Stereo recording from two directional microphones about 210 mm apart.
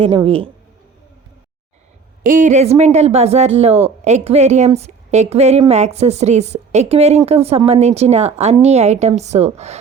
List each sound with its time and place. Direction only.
0.0 s a woman's voice: 25° right (ahead or behind)
2.2 s a woman's voice: 35° right (ahead or behind)